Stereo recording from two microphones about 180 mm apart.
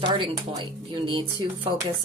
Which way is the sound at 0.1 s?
25° right (ahead or behind).